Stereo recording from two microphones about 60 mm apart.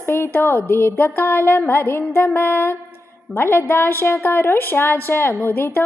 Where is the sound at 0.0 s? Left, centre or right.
Left.